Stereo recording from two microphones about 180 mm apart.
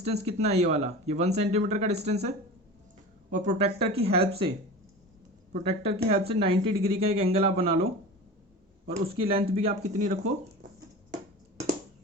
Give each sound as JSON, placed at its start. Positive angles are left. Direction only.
{"t": 0.0, "sound": "speech", "side_deg": -35}
{"t": 3.3, "sound": "speech", "side_deg": -40}
{"t": 5.5, "sound": "speech", "side_deg": -35}
{"t": 8.9, "sound": "speech", "side_deg": -30}